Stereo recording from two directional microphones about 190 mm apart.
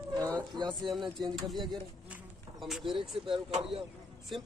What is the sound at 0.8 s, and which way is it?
Speech, centre (ahead or behind).